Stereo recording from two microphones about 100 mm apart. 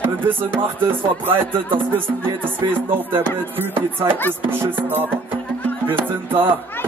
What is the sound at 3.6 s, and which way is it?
Speech, 20° right (ahead or behind).